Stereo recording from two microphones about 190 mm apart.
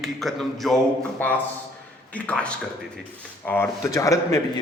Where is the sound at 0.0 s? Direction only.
Centre (ahead or behind).